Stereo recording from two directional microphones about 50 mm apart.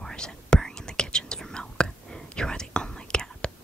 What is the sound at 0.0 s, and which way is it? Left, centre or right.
Whispering, centre.